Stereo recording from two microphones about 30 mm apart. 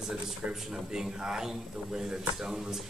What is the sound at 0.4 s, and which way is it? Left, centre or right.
Speech, right.